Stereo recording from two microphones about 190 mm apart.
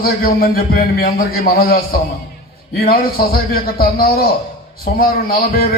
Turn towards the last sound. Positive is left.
turn(degrees=50)  # may be behind; listen again after turning